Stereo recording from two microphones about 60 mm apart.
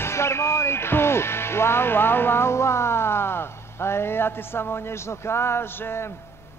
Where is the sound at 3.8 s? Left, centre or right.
Left.